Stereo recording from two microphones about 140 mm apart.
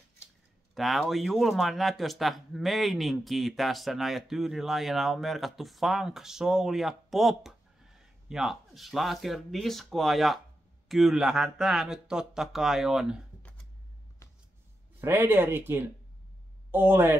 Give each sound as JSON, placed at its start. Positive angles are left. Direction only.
{"t": 0.7, "sound": "speech", "side_deg": 0}
{"t": 15.0, "sound": "speech", "side_deg": -15}